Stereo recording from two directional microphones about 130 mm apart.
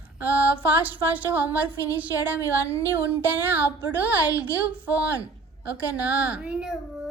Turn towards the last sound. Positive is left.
turn(degrees=-5)  # may be behind; listen again after turning